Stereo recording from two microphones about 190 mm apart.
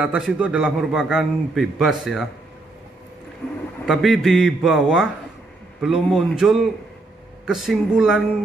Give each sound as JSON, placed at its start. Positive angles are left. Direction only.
{"t": 0.0, "sound": "a man's voice", "side_deg": -5}
{"t": 3.8, "sound": "a man's voice", "side_deg": 0}